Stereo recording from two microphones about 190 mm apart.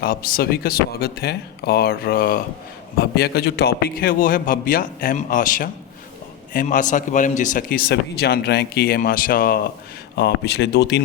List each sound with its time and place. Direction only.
0.0 s a man's voice: 50° left (ahead or behind)
10.2 s speech: 60° left (ahead or behind)